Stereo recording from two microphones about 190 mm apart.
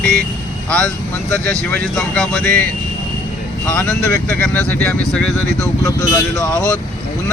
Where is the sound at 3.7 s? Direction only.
10° left (ahead or behind).